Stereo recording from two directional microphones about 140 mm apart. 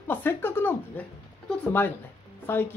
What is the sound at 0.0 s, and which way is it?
Speech, 15° left (ahead or behind).